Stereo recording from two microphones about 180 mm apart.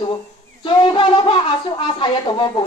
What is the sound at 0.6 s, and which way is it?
A woman's voice, 30° left (ahead or behind).